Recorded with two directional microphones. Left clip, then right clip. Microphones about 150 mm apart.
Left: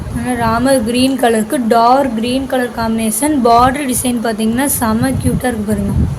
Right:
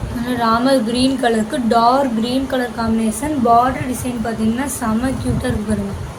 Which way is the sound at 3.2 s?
65° left (ahead or behind).